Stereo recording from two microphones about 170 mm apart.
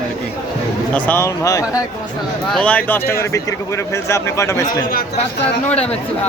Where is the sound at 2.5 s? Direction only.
5° left (ahead or behind).